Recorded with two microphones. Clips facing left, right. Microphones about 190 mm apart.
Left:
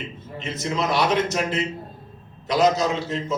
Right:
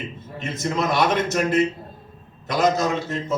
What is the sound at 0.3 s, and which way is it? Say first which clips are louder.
A man's voice: right 1 dB; 50° right (ahead or behind).